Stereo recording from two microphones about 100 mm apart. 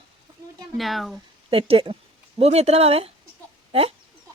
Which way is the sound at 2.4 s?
90° right.